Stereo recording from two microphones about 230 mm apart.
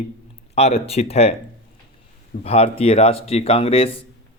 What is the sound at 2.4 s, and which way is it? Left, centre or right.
Speech, left.